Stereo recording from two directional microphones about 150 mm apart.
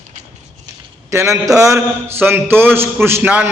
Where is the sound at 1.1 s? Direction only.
20° right (ahead or behind).